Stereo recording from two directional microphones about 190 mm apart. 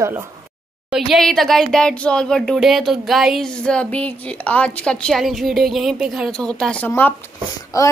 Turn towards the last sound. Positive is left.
turn(degrees=15)  # may be behind; listen again after turning